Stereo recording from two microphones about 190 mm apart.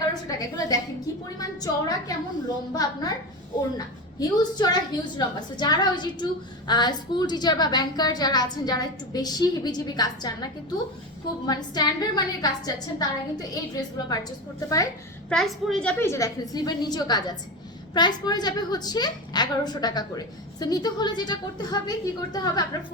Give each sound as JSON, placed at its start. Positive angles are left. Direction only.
{"t": 0.1, "sound": "a woman's voice", "side_deg": 20}
{"t": 15.3, "sound": "a woman's voice", "side_deg": 0}